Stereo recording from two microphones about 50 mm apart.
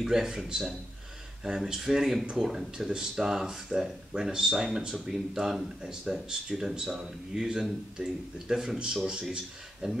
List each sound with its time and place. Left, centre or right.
0.0 s speech: centre